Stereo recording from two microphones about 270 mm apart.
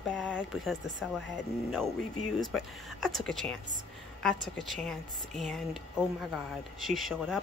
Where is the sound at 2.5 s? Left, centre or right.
Centre.